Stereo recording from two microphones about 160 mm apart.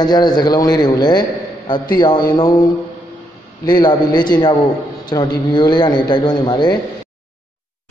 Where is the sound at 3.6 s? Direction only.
25° left (ahead or behind).